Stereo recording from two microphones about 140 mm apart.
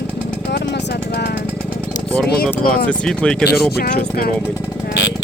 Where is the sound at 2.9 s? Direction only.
5° left (ahead or behind).